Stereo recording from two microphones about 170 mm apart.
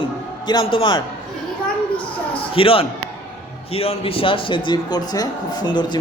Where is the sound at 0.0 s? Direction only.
25° left (ahead or behind).